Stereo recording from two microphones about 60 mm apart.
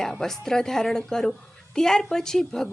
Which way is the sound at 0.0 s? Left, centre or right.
Centre.